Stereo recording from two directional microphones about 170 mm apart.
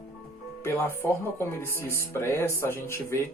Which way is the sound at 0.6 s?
15° left (ahead or behind).